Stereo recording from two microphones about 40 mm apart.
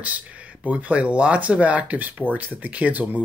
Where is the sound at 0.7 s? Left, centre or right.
Right.